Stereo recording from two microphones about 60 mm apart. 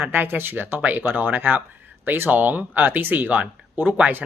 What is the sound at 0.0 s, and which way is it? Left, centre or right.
Speech, right.